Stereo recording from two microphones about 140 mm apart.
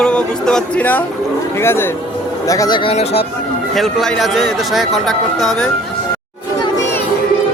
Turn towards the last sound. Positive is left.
turn(degrees=0)  # may be behind; listen again after turning